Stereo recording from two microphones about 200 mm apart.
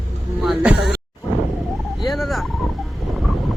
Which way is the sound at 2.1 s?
Centre (ahead or behind).